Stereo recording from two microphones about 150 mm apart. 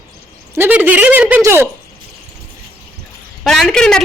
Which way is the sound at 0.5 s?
15° right (ahead or behind).